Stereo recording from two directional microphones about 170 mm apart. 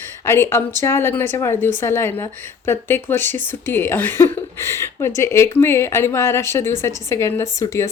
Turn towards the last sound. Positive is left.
turn(degrees=20)  # may be behind; listen again after turning